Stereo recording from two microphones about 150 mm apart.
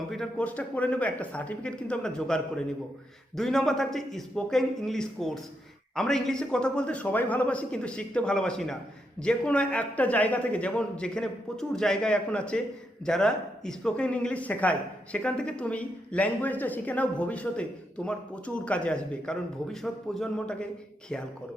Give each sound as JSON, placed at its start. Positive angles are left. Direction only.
{"t": 0.1, "sound": "a man's voice", "side_deg": 5}